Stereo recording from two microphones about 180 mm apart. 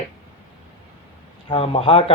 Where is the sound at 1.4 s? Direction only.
30° left (ahead or behind).